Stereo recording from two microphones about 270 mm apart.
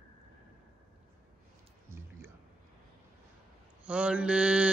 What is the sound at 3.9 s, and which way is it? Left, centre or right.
Mantra, centre.